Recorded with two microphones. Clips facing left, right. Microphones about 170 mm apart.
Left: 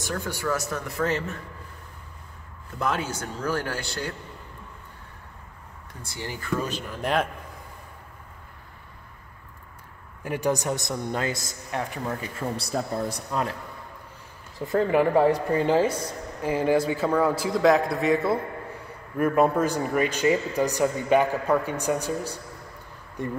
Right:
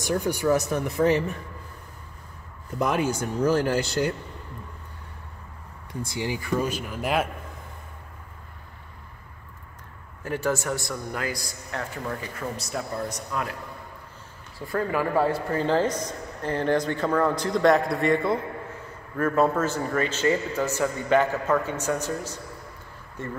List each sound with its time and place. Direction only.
0.0 s speech: 20° right (ahead or behind)
2.8 s speech: 15° right (ahead or behind)
6.0 s speech: 15° right (ahead or behind)
10.2 s a man's voice: 15° left (ahead or behind)
12.5 s speech: 30° left (ahead or behind)
14.6 s speech: 20° left (ahead or behind); by 18.4 s 5° left (ahead or behind)
19.1 s speech: 15° left (ahead or behind)